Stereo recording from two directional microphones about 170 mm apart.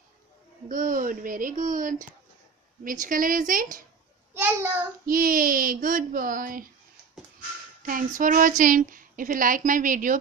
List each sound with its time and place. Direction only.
0.7 s speech: 50° right (ahead or behind)
4.3 s a child's voice: 15° right (ahead or behind)
5.0 s speech: 55° right (ahead or behind)
7.8 s speech: 55° right (ahead or behind)